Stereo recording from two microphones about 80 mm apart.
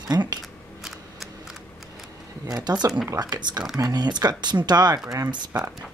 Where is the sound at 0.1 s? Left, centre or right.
Right.